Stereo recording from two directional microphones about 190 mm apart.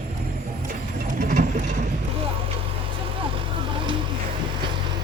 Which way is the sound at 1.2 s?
40° right (ahead or behind).